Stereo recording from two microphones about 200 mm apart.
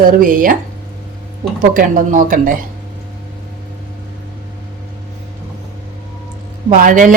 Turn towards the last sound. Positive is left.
turn(degrees=-40)  # may be behind; listen again after turning